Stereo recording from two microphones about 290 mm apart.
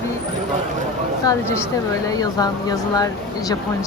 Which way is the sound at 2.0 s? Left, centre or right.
Centre.